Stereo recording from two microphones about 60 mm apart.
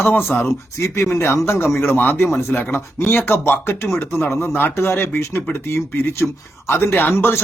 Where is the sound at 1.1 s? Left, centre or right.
Left.